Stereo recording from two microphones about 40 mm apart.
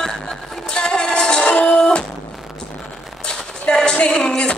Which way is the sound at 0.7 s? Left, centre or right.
Left.